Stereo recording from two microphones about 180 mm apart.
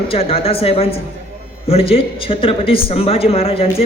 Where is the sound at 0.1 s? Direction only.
35° left (ahead or behind).